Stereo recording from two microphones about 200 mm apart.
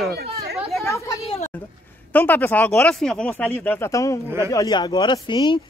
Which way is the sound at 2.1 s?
10° left (ahead or behind).